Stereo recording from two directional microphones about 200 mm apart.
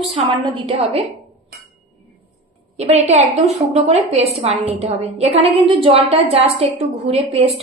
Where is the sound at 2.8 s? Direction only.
30° right (ahead or behind).